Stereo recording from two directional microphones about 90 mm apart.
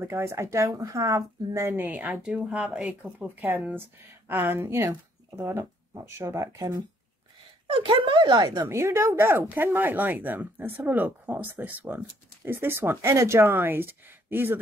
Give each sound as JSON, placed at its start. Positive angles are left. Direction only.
{"t": 0.0, "sound": "speech", "side_deg": -25}
{"t": 1.8, "sound": "a woman's voice", "side_deg": -20}
{"t": 2.3, "sound": "speech", "side_deg": -5}
{"t": 3.0, "sound": "speech", "side_deg": -20}
{"t": 7.6, "sound": "speech", "side_deg": -70}
{"t": 8.6, "sound": "speech", "side_deg": -30}